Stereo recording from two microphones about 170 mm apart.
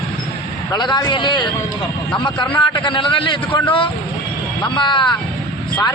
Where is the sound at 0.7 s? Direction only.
25° left (ahead or behind).